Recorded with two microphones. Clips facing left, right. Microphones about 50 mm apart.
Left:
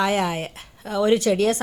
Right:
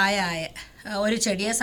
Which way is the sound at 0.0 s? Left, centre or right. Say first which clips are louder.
Left 2 dB; left.